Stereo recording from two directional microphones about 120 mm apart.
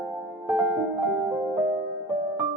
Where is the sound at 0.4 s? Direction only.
10° right (ahead or behind).